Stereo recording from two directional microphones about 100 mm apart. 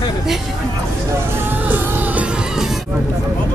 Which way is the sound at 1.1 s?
20° right (ahead or behind).